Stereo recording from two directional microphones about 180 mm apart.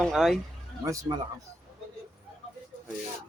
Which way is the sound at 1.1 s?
20° right (ahead or behind).